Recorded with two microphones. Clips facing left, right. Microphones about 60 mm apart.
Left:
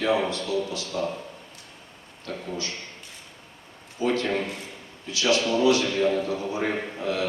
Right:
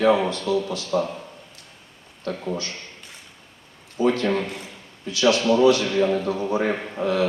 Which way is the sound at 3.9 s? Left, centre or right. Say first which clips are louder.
Right 4 dB; right.